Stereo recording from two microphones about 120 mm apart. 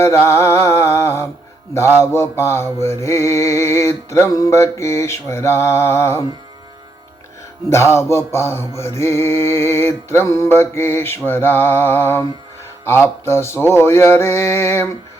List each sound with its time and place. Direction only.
0.0 s music: 25° left (ahead or behind)
7.7 s music: 20° left (ahead or behind)